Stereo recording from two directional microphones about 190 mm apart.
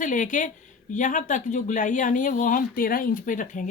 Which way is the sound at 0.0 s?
45° left (ahead or behind).